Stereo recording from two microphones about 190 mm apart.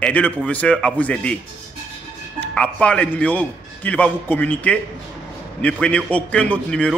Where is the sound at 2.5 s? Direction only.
5° left (ahead or behind).